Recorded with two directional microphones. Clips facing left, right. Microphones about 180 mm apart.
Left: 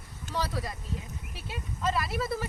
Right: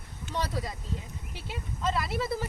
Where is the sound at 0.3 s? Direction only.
Centre (ahead or behind).